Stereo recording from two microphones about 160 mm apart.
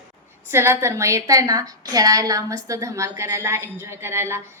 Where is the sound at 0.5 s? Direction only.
15° right (ahead or behind).